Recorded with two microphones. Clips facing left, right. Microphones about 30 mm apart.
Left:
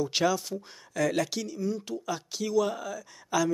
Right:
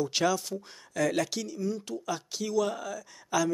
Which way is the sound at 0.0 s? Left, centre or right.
Centre.